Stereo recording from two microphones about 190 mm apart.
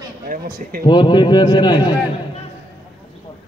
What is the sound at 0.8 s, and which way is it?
Speech, 25° left (ahead or behind).